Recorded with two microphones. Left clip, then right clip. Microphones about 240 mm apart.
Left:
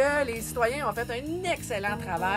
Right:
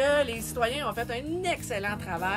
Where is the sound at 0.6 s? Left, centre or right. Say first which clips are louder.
Left 2 dB; centre.